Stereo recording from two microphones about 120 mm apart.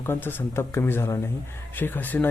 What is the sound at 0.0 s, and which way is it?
Speech, 20° left (ahead or behind).